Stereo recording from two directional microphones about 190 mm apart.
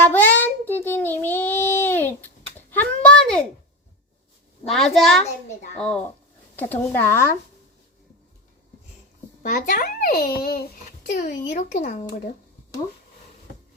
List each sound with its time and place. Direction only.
0.0 s child singing: 10° left (ahead or behind)
3.0 s a sound: 5° left (ahead or behind)
4.7 s a child's voice: centre (ahead or behind)
6.6 s speech: 10° left (ahead or behind)
9.4 s a child's voice: 45° left (ahead or behind)